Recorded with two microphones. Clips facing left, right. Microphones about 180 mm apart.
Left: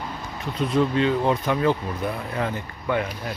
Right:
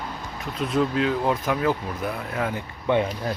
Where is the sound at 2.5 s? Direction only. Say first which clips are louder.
Right 3 dB; 25° right (ahead or behind).